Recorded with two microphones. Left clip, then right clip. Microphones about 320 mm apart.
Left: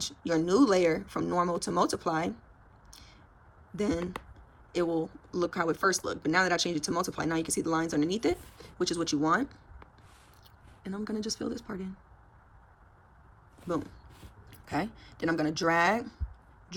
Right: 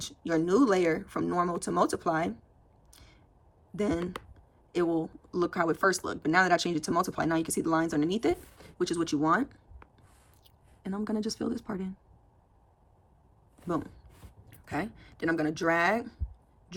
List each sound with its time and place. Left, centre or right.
0.0 s speech: centre
2.9 s a sound: centre
3.8 s speech: centre
13.7 s speech: centre